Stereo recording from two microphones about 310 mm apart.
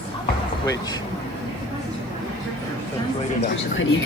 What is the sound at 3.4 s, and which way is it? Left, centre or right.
Speech, left.